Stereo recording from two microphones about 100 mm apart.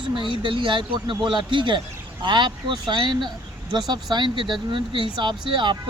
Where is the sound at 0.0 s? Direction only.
55° right (ahead or behind).